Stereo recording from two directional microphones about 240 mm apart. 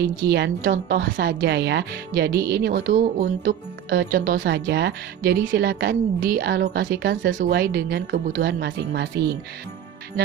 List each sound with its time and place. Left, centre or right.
0.2 s a woman's voice: right